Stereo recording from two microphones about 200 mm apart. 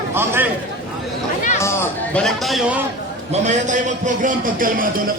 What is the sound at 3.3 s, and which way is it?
A man's voice, 35° right (ahead or behind).